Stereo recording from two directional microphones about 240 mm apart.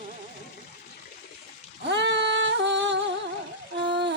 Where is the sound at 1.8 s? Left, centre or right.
Right.